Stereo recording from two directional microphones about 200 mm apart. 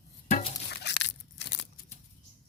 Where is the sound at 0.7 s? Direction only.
55° left (ahead or behind).